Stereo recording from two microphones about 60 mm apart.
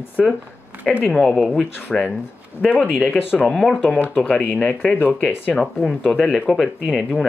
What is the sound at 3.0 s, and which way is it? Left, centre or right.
Speech, left.